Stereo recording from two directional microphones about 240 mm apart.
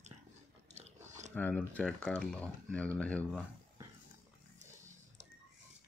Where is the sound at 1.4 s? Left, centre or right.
Centre.